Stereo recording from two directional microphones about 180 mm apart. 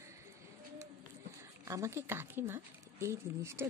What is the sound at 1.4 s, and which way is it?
Speech, 15° right (ahead or behind).